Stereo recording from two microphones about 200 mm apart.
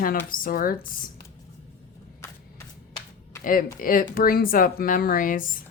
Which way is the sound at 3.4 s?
45° left (ahead or behind).